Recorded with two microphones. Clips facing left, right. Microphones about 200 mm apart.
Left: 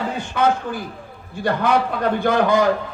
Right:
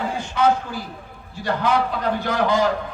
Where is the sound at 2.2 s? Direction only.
50° left (ahead or behind).